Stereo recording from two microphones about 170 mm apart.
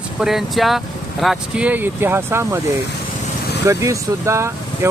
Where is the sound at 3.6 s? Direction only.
20° right (ahead or behind).